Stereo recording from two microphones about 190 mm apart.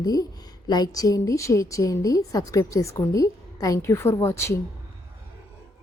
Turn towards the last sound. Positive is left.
turn(degrees=15)  # may be behind; listen again after turning